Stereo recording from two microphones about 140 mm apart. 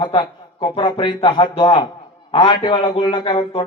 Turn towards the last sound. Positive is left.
turn(degrees=35)  # may be behind; listen again after turning